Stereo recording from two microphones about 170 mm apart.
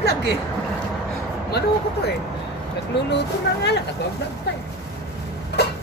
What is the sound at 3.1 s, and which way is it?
Speech, 80° left.